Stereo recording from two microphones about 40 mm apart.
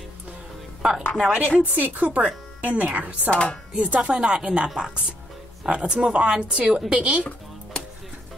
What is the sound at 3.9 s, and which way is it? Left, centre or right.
A woman's voice, right.